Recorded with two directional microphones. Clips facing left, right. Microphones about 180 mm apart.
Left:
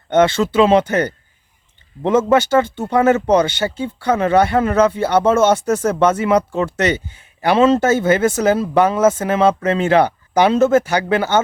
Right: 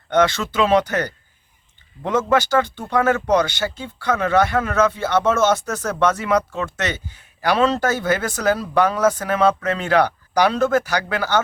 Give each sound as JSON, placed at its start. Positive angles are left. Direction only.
{"t": 0.1, "sound": "speech", "side_deg": 25}